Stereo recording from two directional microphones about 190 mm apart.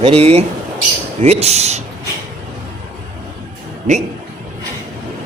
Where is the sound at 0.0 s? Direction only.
30° right (ahead or behind).